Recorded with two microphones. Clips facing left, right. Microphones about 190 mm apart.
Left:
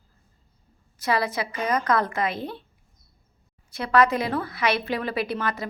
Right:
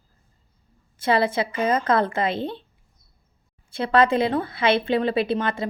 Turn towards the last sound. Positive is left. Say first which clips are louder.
# right 4 dB
turn(degrees=-25)  # may be behind; listen again after turning